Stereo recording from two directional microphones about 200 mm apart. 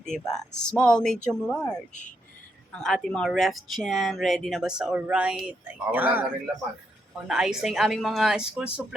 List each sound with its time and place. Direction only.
0.3 s speech: 5° left (ahead or behind)
1.9 s speech: 35° left (ahead or behind)
2.8 s speech: centre (ahead or behind)